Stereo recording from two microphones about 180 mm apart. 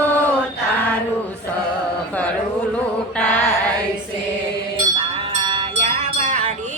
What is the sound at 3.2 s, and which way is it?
Mantra, 10° left (ahead or behind).